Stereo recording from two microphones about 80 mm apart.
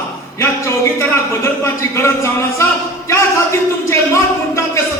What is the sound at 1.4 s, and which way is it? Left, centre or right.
Speech, left.